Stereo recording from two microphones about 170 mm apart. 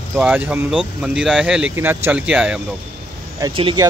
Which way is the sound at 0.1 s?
5° right (ahead or behind).